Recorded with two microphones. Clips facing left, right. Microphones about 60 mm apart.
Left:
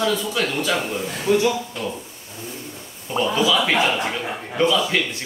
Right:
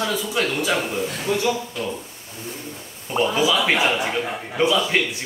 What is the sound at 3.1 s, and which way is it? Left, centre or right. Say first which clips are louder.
Speech: even; centre.